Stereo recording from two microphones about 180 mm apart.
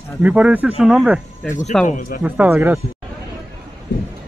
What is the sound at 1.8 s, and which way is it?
Speech, 50° left (ahead or behind).